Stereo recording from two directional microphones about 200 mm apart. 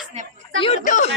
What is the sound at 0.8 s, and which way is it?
Speech, 40° left (ahead or behind).